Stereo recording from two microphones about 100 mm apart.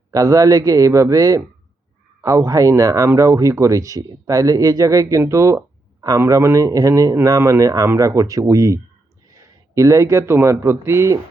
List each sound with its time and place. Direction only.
0.1 s speech: 35° right (ahead or behind)